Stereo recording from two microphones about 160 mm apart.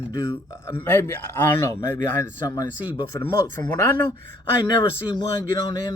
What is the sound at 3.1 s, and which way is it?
Speech, 25° left (ahead or behind).